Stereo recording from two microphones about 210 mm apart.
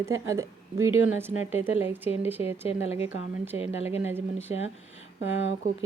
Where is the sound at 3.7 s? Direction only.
30° left (ahead or behind).